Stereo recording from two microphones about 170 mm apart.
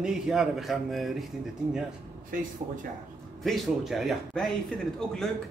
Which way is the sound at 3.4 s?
Centre (ahead or behind).